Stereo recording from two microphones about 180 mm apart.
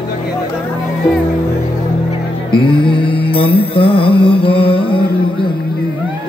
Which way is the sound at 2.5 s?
25° left (ahead or behind).